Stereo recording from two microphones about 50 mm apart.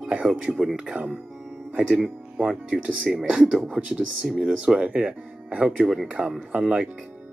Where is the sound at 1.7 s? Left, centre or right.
Right.